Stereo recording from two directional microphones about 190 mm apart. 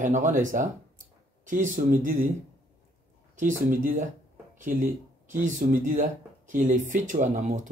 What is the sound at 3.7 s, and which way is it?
Speech, 45° right (ahead or behind).